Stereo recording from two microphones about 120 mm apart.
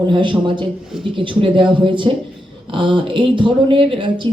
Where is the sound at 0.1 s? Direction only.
45° right (ahead or behind).